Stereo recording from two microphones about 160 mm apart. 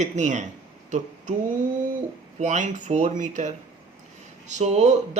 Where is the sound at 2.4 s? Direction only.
50° right (ahead or behind).